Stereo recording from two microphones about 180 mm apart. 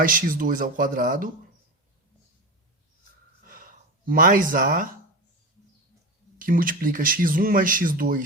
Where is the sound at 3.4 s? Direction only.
50° right (ahead or behind).